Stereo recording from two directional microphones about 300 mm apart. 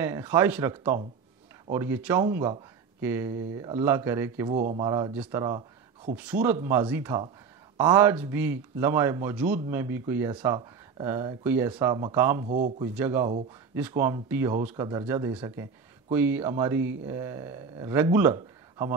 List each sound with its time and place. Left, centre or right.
0.0 s a man's voice: centre
4.6 s a man's voice: right
4.8 s a man's voice: centre
12.4 s a man's voice: right
12.8 s a man's voice: centre